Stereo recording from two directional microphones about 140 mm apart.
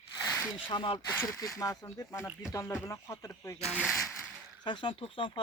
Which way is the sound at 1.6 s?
25° left (ahead or behind).